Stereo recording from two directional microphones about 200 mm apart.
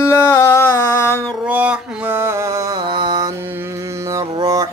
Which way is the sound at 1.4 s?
5° right (ahead or behind).